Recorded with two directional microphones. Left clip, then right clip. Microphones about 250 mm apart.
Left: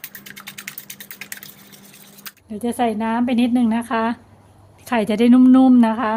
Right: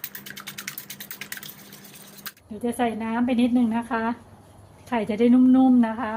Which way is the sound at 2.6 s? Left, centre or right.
Left.